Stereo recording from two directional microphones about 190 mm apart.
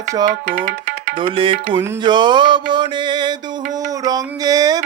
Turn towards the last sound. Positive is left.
turn(degrees=-20)  # may be behind; listen again after turning